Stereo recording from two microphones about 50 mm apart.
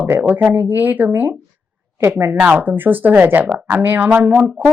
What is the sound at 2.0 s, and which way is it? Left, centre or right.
Speech, right.